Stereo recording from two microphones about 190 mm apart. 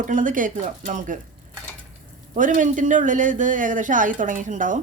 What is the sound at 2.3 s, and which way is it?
Speech, 45° right (ahead or behind).